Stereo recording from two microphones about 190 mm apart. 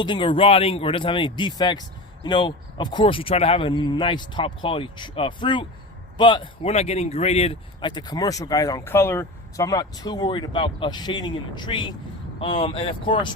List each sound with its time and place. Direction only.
0.0 s speech: 25° left (ahead or behind)